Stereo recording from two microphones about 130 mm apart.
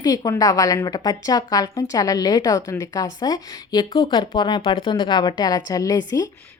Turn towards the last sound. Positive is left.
turn(degrees=25)  # may be behind; listen again after turning